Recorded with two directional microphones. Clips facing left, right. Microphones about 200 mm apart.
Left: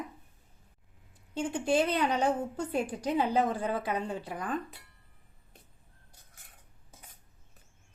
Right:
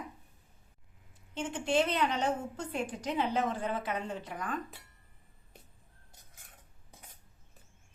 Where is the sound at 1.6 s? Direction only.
35° left (ahead or behind).